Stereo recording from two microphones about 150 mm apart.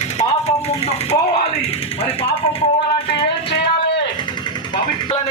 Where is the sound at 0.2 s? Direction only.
45° left (ahead or behind).